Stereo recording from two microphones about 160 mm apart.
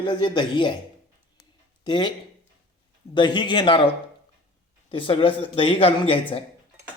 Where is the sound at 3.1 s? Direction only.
30° left (ahead or behind).